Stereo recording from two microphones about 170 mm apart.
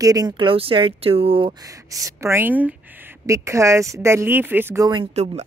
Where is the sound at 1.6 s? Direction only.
20° right (ahead or behind).